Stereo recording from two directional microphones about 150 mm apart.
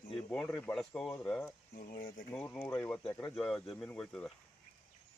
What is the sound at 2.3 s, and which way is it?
Speech, 10° left (ahead or behind).